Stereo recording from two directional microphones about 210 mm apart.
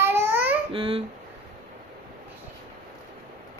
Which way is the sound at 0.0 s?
10° right (ahead or behind).